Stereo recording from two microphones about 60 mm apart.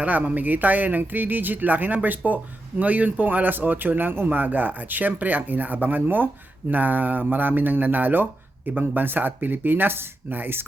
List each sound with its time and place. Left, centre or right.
0.0 s speech: right